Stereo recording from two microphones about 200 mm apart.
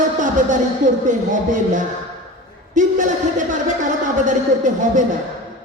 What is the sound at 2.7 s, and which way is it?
Speech, 40° right (ahead or behind).